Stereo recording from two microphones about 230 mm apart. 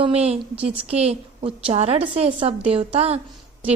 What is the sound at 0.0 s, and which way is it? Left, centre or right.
A woman's voice, right.